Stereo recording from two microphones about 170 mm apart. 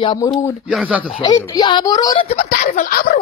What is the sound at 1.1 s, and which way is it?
Speech, 25° left (ahead or behind).